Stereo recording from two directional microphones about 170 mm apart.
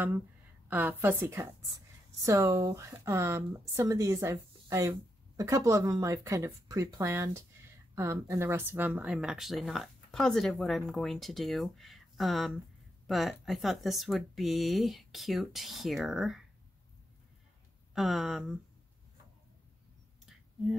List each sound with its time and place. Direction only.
0.7 s speech: 10° right (ahead or behind)
17.9 s speech: centre (ahead or behind)